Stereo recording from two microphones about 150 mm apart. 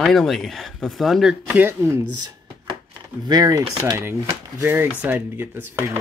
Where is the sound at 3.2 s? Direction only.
25° right (ahead or behind).